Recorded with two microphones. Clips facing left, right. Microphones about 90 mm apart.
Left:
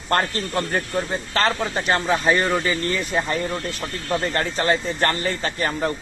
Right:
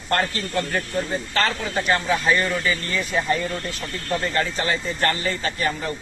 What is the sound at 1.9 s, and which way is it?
Speech, 30° left (ahead or behind).